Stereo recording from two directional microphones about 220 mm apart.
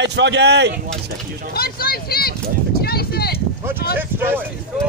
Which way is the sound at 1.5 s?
45° left (ahead or behind).